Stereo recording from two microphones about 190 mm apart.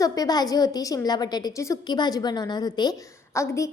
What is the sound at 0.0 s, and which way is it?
A woman's voice, 20° left (ahead or behind).